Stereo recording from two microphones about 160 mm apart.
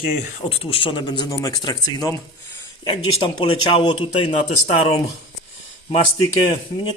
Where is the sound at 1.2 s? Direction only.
20° left (ahead or behind).